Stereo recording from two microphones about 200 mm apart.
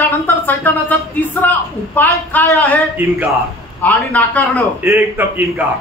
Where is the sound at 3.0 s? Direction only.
10° right (ahead or behind).